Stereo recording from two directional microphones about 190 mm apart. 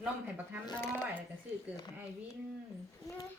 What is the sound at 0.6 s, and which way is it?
Speech, 20° left (ahead or behind).